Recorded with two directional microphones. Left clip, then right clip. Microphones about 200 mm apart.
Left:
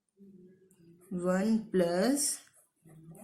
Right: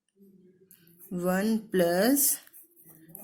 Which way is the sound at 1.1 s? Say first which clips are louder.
Right 2 dB; 45° right (ahead or behind).